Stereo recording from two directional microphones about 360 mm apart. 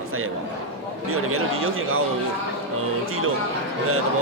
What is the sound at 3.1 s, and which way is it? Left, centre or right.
Speech, right.